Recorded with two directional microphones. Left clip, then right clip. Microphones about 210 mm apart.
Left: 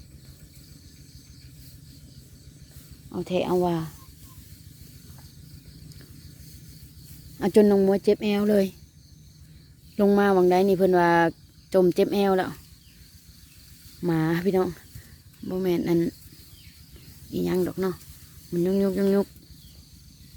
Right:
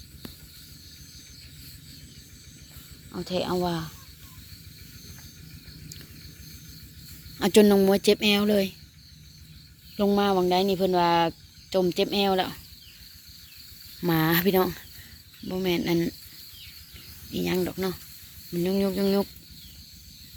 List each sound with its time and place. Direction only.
3.2 s speech: 40° left (ahead or behind)
7.3 s speech: 20° left (ahead or behind)
10.0 s speech: 40° left (ahead or behind)
14.0 s speech: 15° left (ahead or behind)
15.4 s speech: 30° left (ahead or behind)
17.3 s speech: 25° left (ahead or behind)